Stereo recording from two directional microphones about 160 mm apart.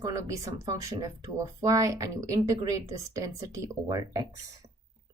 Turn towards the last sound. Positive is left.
turn(degrees=-20)  # may be behind; listen again after turning